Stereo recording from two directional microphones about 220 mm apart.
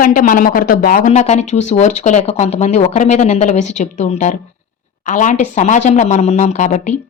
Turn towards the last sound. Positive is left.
turn(degrees=30)  # may be behind; listen again after turning